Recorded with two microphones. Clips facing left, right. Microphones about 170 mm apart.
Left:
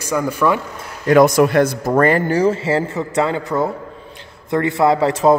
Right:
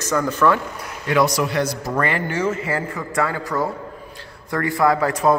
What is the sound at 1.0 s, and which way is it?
A man's voice, 50° left (ahead or behind).